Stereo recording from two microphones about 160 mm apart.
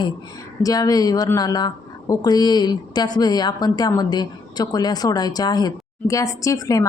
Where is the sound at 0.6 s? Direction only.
25° left (ahead or behind).